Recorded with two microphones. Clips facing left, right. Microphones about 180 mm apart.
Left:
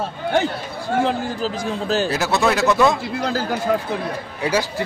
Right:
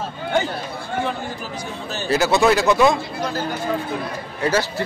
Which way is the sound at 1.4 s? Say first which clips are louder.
Left 7 dB; 90° left.